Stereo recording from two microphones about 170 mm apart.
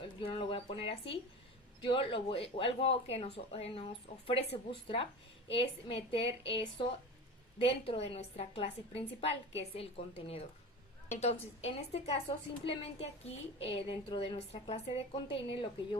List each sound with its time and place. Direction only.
0.0 s speech: 30° left (ahead or behind)